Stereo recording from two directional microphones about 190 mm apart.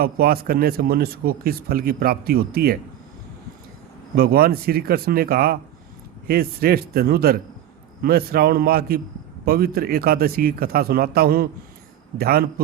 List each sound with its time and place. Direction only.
0.0 s speech: 55° right (ahead or behind)
4.1 s a man's voice: 55° right (ahead or behind)